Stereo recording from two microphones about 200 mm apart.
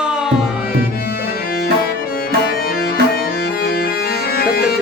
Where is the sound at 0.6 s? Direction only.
50° left (ahead or behind).